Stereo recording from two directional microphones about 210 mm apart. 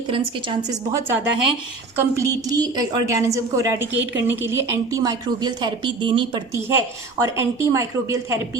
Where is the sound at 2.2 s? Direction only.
15° right (ahead or behind).